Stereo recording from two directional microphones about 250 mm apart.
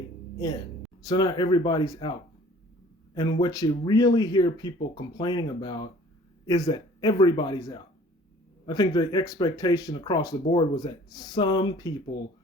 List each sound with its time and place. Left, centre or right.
1.0 s speech: centre
3.2 s speech: centre